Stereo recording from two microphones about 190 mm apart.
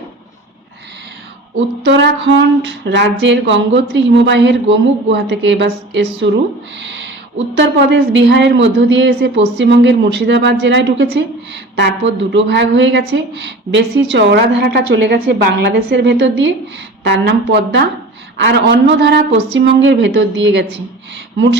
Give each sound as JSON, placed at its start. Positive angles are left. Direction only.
{"t": 1.5, "sound": "speech", "side_deg": -65}